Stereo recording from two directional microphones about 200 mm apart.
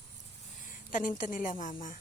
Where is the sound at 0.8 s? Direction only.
40° left (ahead or behind).